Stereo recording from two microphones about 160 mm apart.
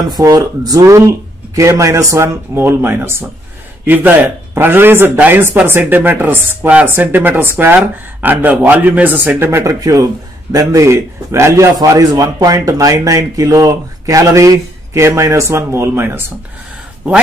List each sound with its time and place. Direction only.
0.1 s a man's voice: 20° right (ahead or behind)